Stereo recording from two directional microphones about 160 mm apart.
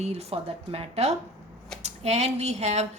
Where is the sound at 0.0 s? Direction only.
40° right (ahead or behind).